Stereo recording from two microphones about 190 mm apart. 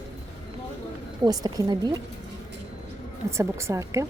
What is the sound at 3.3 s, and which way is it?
Speech, 15° right (ahead or behind).